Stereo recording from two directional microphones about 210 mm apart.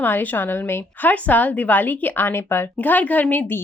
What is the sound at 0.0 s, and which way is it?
A woman's voice, 10° left (ahead or behind).